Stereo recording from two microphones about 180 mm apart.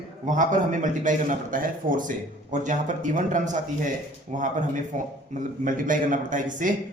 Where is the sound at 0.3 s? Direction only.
45° right (ahead or behind).